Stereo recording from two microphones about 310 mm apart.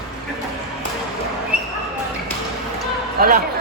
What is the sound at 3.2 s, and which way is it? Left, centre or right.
Speech, right.